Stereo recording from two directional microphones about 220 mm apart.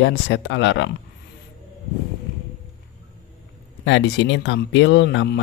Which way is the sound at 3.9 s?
55° left (ahead or behind).